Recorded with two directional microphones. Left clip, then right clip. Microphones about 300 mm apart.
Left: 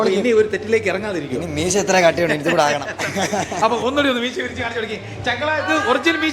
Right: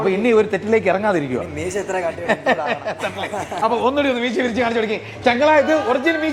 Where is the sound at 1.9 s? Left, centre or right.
Left.